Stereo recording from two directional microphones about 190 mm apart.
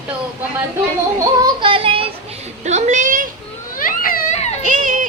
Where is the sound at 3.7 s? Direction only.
50° left (ahead or behind).